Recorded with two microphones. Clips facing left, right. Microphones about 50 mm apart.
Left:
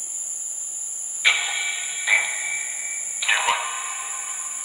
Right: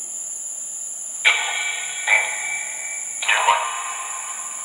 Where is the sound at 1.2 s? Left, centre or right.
Centre.